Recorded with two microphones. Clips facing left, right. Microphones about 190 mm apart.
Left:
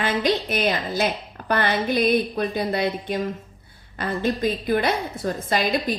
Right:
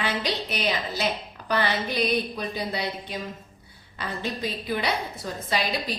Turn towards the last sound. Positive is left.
turn(degrees=50)  # may be behind; listen again after turning